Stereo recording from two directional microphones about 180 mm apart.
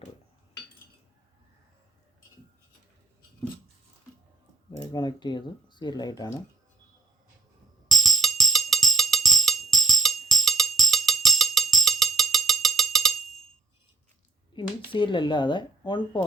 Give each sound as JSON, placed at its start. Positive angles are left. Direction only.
{"t": 4.8, "sound": "speech", "side_deg": 25}
{"t": 7.9, "sound": "music", "side_deg": 0}
{"t": 14.5, "sound": "speech", "side_deg": 25}